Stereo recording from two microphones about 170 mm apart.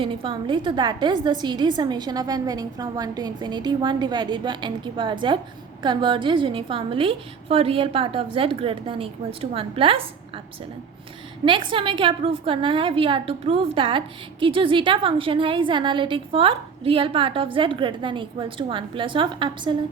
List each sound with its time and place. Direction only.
0.0 s a woman's voice: 30° right (ahead or behind)
11.4 s a woman's voice: 30° right (ahead or behind)